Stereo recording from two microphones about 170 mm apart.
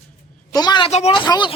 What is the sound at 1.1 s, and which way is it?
Speech, 25° left (ahead or behind).